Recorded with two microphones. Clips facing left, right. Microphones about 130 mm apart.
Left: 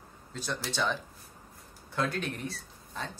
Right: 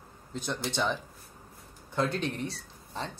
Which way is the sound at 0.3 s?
20° right (ahead or behind).